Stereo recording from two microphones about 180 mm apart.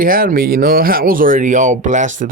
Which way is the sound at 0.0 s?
50° right (ahead or behind).